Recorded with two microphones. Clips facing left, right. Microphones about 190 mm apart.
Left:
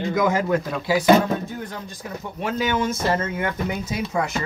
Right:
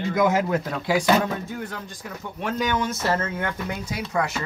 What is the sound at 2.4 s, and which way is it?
Speech, 5° left (ahead or behind).